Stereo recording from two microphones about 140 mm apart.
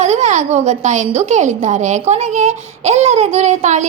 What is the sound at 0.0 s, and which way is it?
A woman's voice, 50° right (ahead or behind).